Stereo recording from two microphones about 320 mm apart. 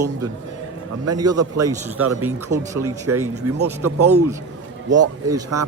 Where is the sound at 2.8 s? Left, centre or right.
Right.